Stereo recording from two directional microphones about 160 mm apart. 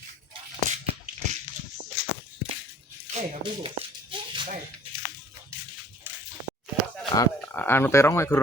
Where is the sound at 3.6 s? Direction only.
35° right (ahead or behind).